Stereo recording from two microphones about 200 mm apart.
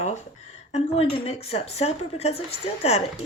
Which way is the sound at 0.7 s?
30° left (ahead or behind).